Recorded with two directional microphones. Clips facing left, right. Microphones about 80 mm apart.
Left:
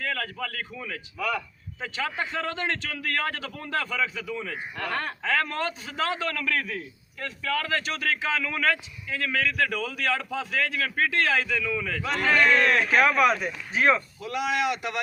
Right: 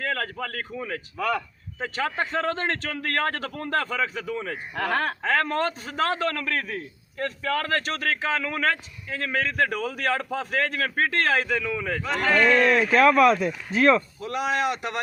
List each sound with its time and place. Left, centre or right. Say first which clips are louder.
0.0 s a man's voice: right 2 dB; right
4.7 s speech: right 6 dB; right
5.2 s a man's voice: right 1 dB; right
12.0 s a man's voice: right 1 dB; centre
14.2 s a man's voice: right 1 dB; right